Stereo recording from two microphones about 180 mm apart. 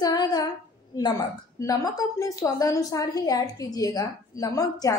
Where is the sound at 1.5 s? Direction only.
20° left (ahead or behind).